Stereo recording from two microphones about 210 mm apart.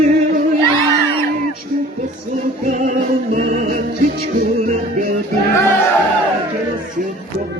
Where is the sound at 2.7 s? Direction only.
40° right (ahead or behind).